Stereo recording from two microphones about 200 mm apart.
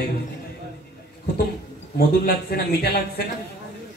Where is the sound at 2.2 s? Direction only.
50° left (ahead or behind).